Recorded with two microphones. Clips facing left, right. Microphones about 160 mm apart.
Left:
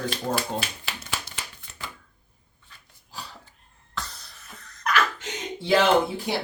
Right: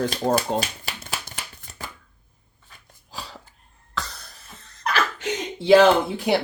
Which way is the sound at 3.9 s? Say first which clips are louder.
Right 4 dB; 80° right.